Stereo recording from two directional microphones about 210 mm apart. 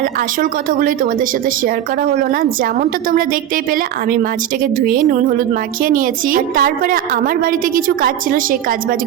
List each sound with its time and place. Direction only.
0.0 s a woman's voice: 40° right (ahead or behind)